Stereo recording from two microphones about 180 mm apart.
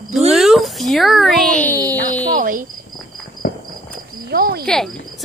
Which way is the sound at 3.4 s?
50° left (ahead or behind).